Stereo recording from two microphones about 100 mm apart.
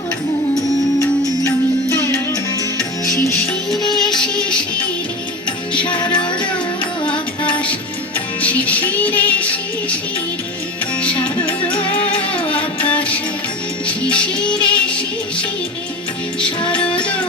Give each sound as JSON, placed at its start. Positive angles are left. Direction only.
{"t": 1.5, "sound": "music", "side_deg": 25}
{"t": 3.9, "sound": "music", "side_deg": 5}
{"t": 6.0, "sound": "music", "side_deg": 50}
{"t": 8.4, "sound": "music", "side_deg": 15}
{"t": 12.5, "sound": "music", "side_deg": 15}
{"t": 16.4, "sound": "music", "side_deg": 10}